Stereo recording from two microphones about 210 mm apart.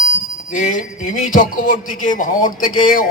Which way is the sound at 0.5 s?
35° left (ahead or behind).